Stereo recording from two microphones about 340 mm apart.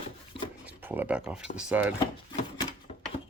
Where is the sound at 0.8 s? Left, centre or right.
Centre.